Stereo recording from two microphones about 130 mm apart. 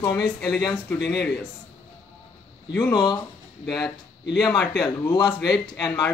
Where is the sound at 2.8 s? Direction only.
30° left (ahead or behind).